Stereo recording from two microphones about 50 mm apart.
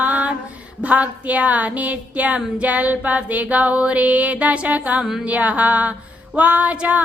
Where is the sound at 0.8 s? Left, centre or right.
Right.